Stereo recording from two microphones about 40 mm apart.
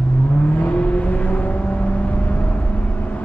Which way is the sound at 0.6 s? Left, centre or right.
Left.